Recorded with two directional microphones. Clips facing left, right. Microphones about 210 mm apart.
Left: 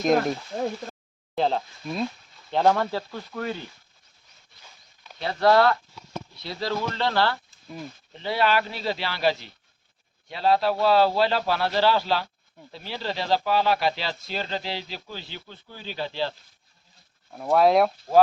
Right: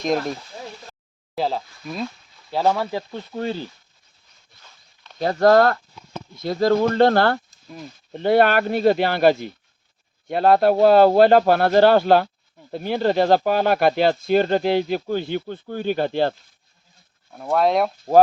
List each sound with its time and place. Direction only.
0.2 s speech: 45° left (ahead or behind)
1.4 s speech: 5° right (ahead or behind)
3.1 s speech: 25° right (ahead or behind)
5.2 s speech: 45° right (ahead or behind)
17.3 s speech: centre (ahead or behind)